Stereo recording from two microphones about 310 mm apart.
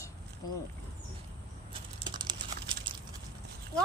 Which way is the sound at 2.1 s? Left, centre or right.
Centre.